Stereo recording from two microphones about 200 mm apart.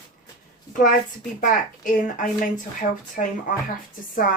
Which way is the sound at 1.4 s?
40° left (ahead or behind).